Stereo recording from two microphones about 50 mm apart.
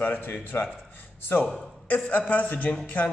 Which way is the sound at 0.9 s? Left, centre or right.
Left.